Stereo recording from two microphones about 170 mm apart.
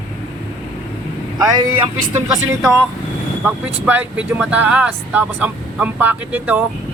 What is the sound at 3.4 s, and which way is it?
Speech, 10° right (ahead or behind).